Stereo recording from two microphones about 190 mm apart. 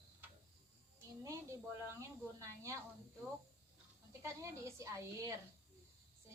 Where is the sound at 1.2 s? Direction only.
15° right (ahead or behind).